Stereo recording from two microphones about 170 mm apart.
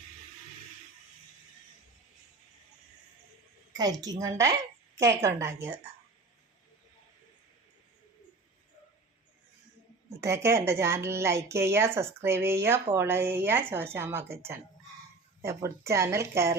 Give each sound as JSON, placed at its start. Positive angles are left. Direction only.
{"t": 3.8, "sound": "a woman's voice", "side_deg": -20}
{"t": 10.1, "sound": "a woman's voice", "side_deg": -15}
{"t": 15.4, "sound": "a woman's voice", "side_deg": -15}